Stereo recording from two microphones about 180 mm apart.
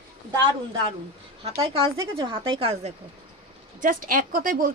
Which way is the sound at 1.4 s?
35° right (ahead or behind).